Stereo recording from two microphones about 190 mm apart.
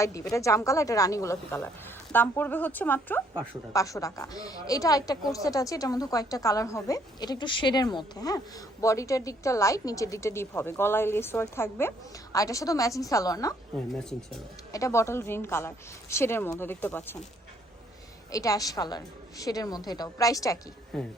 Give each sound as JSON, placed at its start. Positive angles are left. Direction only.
{"t": 0.0, "sound": "a woman's voice", "side_deg": 15}
{"t": 14.0, "sound": "speech", "side_deg": 0}
{"t": 14.7, "sound": "a woman's voice", "side_deg": 15}
{"t": 18.3, "sound": "a woman's voice", "side_deg": 15}
{"t": 20.9, "sound": "speech", "side_deg": 0}